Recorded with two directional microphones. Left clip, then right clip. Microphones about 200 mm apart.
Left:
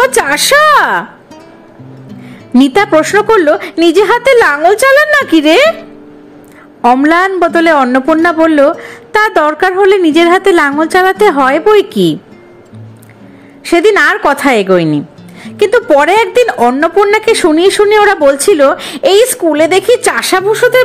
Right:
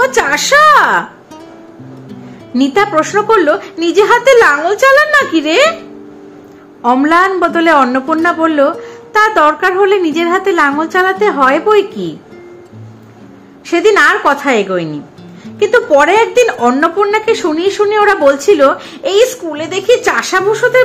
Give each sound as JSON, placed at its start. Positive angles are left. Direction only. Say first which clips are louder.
{"t": 0.0, "sound": "a woman's voice", "louder": "left 2 dB", "side_deg": 35}
{"t": 2.5, "sound": "a woman's voice", "louder": "left 4 dB", "side_deg": 40}
{"t": 6.8, "sound": "a woman's voice", "louder": "left 2 dB", "side_deg": 35}
{"t": 13.7, "sound": "a woman's voice", "louder": "left 1 dB", "side_deg": 40}